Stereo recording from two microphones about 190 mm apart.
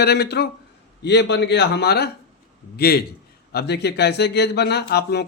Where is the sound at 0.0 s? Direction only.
60° left (ahead or behind).